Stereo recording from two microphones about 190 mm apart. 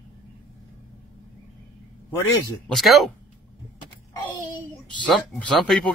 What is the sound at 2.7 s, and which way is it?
Speech, centre (ahead or behind).